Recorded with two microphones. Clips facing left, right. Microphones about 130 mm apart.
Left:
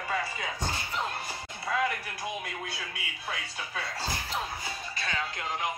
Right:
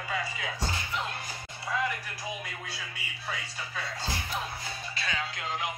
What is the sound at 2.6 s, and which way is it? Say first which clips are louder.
Speech: left 2 dB; 60° left (ahead or behind).